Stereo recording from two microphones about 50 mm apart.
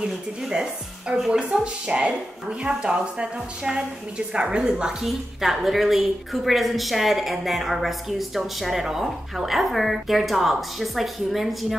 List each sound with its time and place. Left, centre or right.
0.0 s a woman's voice: centre